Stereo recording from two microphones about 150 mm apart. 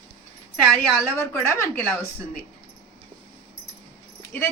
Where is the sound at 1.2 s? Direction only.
20° left (ahead or behind).